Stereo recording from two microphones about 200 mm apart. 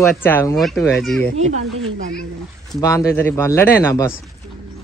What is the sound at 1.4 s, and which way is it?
Speech, 35° right (ahead or behind).